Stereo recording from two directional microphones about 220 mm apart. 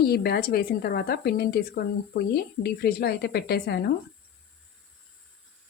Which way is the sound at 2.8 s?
45° left (ahead or behind).